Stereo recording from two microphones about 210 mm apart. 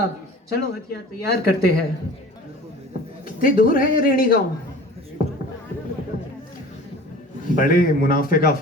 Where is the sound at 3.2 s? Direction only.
40° left (ahead or behind).